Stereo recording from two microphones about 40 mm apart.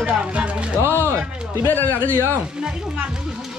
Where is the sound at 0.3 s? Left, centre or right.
Right.